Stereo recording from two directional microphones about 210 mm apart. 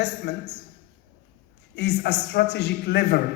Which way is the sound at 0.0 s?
55° left (ahead or behind).